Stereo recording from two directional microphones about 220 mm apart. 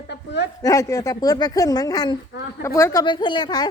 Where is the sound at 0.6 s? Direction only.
15° left (ahead or behind).